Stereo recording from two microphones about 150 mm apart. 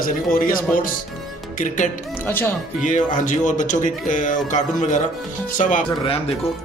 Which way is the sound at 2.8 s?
55° left (ahead or behind).